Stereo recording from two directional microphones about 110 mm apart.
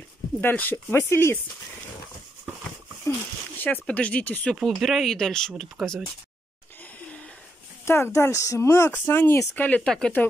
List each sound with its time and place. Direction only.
0.4 s speech: 20° left (ahead or behind)
3.5 s speech: 15° left (ahead or behind)
4.6 s speech: centre (ahead or behind)
7.8 s speech: 25° left (ahead or behind); by 10.2 s 10° left (ahead or behind)